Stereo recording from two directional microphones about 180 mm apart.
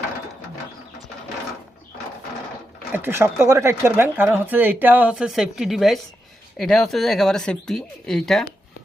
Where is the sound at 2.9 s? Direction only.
15° right (ahead or behind).